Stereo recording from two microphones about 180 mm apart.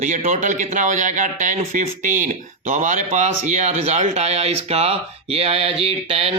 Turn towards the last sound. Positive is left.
turn(degrees=-35)  # may be behind; listen again after turning